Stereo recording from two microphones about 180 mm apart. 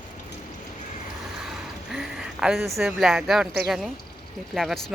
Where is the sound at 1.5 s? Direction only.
Centre (ahead or behind).